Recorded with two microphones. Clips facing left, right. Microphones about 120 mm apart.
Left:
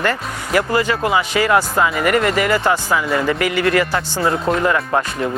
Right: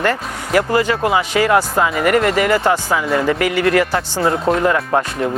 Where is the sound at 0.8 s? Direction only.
35° right (ahead or behind).